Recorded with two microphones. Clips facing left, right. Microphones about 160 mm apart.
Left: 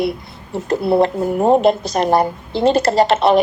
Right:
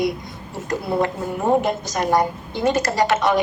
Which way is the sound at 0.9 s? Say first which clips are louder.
Left 7 dB; 30° left (ahead or behind).